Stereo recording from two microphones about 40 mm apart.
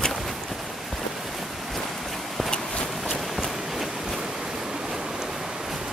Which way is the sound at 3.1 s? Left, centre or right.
Centre.